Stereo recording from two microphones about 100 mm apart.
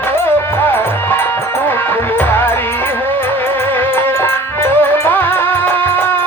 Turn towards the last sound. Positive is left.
turn(degrees=20)  # may be behind; listen again after turning